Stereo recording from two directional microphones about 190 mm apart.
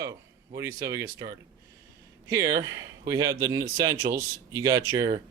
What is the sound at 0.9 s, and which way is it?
Speech, 15° right (ahead or behind).